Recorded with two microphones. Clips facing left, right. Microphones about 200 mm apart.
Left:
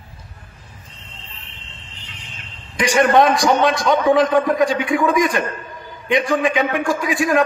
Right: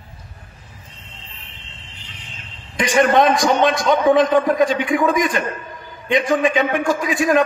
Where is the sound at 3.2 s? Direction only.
20° right (ahead or behind).